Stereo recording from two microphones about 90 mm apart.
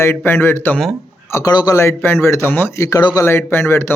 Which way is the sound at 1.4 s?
50° left (ahead or behind).